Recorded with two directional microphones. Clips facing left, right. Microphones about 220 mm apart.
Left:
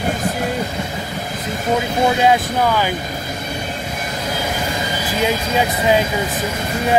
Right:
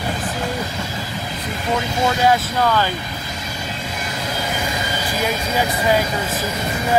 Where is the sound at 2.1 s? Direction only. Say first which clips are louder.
Left 2 dB; 15° left (ahead or behind).